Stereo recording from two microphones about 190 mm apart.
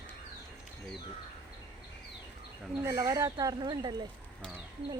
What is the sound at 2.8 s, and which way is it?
Speech, 15° right (ahead or behind).